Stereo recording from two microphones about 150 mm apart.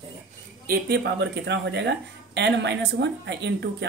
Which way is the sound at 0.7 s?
90° right.